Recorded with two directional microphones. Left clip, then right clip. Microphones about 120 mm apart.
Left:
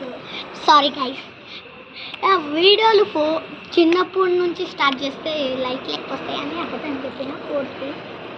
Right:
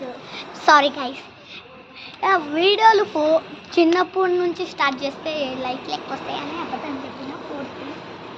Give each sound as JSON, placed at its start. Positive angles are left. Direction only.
{"t": 0.6, "sound": "a woman's voice", "side_deg": -25}
{"t": 2.2, "sound": "a woman's voice", "side_deg": -10}